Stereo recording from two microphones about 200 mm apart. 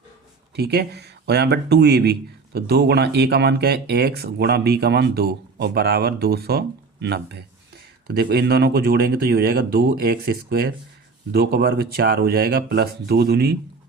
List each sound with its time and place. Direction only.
0.5 s speech: 50° right (ahead or behind)